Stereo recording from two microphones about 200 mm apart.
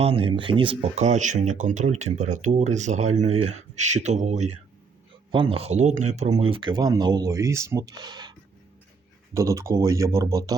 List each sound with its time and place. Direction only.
0.0 s speech: 30° right (ahead or behind)